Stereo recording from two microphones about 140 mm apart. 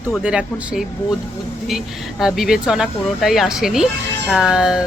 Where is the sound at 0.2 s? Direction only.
5° right (ahead or behind).